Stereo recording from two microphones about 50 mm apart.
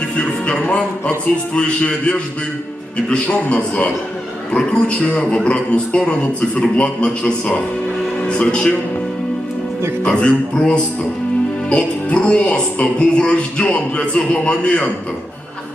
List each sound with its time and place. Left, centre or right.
0.2 s a man's voice: left
10.0 s speech: left